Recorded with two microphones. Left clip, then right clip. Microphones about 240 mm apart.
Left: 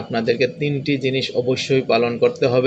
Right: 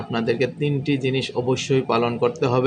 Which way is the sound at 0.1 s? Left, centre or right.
Centre.